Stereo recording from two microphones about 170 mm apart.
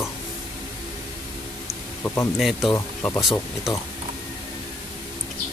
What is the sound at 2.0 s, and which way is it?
Speech, 15° left (ahead or behind).